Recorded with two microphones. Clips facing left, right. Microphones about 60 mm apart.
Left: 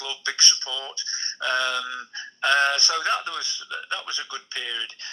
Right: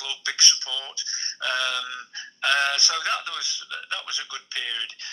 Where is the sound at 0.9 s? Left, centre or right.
Left.